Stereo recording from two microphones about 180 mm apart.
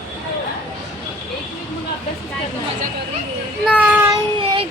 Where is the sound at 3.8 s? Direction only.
10° right (ahead or behind).